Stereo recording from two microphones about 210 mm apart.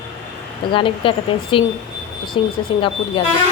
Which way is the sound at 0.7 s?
25° left (ahead or behind).